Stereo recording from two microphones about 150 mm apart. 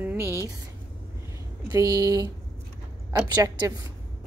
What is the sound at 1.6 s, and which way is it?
A woman's voice, 25° right (ahead or behind).